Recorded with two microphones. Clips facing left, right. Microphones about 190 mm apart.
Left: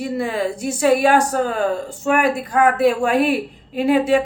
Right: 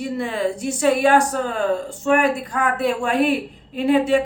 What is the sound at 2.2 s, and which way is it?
Speech, 40° left (ahead or behind).